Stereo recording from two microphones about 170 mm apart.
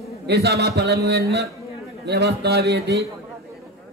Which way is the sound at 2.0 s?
75° right (ahead or behind).